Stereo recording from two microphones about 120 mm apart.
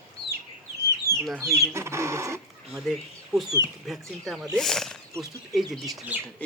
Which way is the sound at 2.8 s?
Centre (ahead or behind).